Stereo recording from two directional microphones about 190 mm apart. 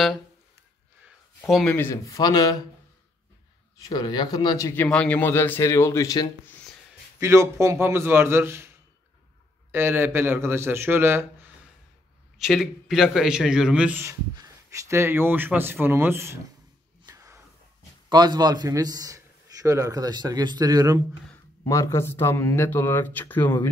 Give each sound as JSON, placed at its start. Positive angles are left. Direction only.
{"t": 1.5, "sound": "speech", "side_deg": 5}
{"t": 3.8, "sound": "speech", "side_deg": 20}
{"t": 4.8, "sound": "speech", "side_deg": 5}
{"t": 7.2, "sound": "speech", "side_deg": -15}
{"t": 9.7, "sound": "speech", "side_deg": -10}
{"t": 12.4, "sound": "a man's voice", "side_deg": 0}
{"t": 17.1, "sound": "a sound", "side_deg": -15}
{"t": 18.1, "sound": "a man's voice", "side_deg": -20}
{"t": 21.6, "sound": "speech", "side_deg": 15}